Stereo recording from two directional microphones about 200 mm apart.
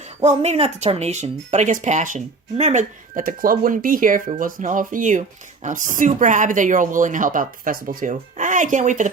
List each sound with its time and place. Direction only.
0.2 s speech: 30° right (ahead or behind)